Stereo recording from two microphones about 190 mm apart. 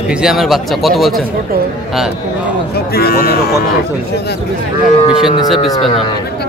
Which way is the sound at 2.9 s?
55° left (ahead or behind).